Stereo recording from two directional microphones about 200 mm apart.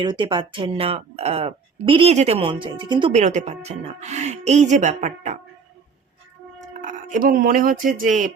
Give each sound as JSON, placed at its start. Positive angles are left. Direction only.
{"t": 0.0, "sound": "speech", "side_deg": -25}
{"t": 6.6, "sound": "a sound", "side_deg": -40}
{"t": 7.9, "sound": "speech", "side_deg": -40}